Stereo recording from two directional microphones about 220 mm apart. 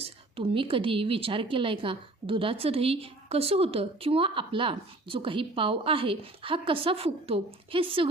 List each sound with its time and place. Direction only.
0.0 s a woman's voice: 25° right (ahead or behind)